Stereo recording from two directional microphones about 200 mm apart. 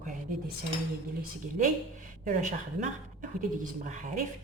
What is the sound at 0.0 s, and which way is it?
Cutlery, 45° right (ahead or behind).